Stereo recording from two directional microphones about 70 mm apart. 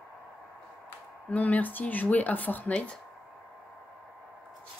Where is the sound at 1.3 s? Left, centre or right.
Left.